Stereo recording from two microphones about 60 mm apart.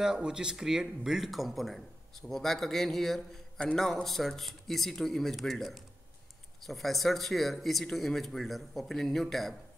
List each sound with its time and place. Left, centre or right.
0.0 s speech: centre
3.5 s a man's voice: centre
3.8 s speech: centre